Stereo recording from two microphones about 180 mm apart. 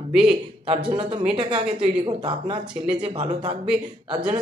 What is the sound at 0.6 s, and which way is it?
Speech, 30° right (ahead or behind).